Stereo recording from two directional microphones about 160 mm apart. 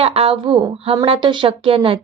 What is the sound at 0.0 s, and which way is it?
A woman's voice, 40° right (ahead or behind).